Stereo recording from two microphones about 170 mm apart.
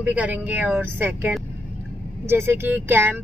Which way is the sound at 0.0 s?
10° right (ahead or behind).